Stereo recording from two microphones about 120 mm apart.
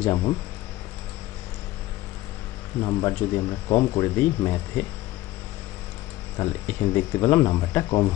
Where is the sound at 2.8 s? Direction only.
30° left (ahead or behind).